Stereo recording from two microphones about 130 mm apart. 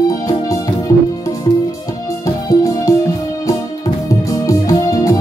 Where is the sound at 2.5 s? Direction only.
25° left (ahead or behind).